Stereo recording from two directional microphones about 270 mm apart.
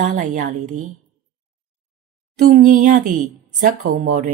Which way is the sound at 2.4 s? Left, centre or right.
Right.